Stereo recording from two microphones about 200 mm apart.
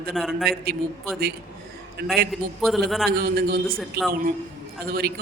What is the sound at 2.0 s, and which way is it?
Speech, 50° right (ahead or behind).